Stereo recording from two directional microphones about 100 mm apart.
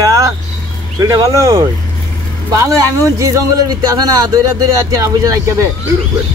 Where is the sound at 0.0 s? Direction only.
35° right (ahead or behind).